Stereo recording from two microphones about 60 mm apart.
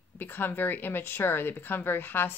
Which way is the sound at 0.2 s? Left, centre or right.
Left.